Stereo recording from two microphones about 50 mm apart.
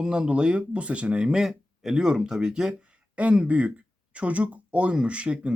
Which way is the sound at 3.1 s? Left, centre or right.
Right.